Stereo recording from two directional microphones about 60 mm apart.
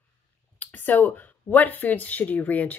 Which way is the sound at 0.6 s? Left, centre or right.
Left.